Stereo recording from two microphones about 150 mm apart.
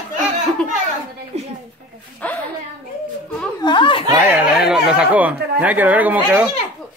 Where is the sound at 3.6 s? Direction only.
35° left (ahead or behind).